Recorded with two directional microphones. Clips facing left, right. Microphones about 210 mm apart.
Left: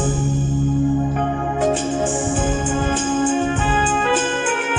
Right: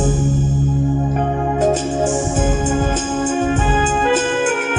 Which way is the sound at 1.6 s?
45° right (ahead or behind).